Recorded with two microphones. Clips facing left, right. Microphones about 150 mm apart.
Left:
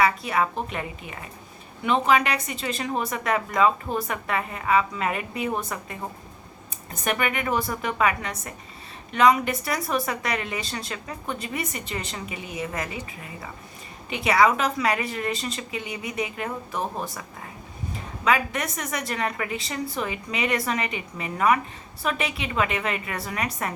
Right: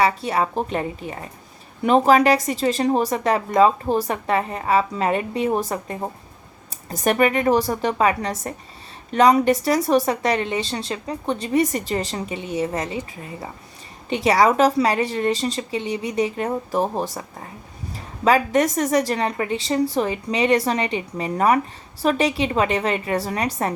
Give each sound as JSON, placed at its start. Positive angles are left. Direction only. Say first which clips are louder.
{"t": 0.0, "sound": "a woman's voice", "louder": "right 3 dB", "side_deg": -30}
{"t": 14.1, "sound": "a woman's voice", "louder": "right 3 dB", "side_deg": -35}